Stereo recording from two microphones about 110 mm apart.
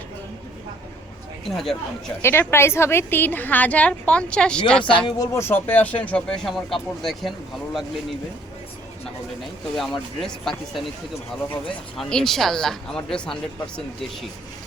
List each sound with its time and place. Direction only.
1.5 s speech: 5° left (ahead or behind)
2.2 s speech: 20° left (ahead or behind)
5.0 s speech: 40° left (ahead or behind)
5.4 s speech: 20° left (ahead or behind); by 7.9 s centre (ahead or behind)
9.7 s speech: centre (ahead or behind)
11.9 s speech: 5° left (ahead or behind)